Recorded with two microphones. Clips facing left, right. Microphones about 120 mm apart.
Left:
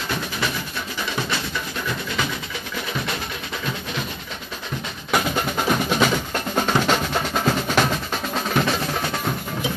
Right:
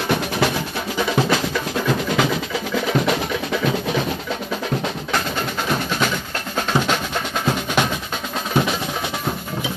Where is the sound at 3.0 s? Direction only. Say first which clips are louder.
Right 8 dB; 90° right.